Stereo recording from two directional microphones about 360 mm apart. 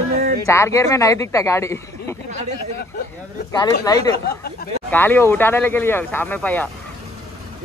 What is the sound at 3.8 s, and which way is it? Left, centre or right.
Speech, centre.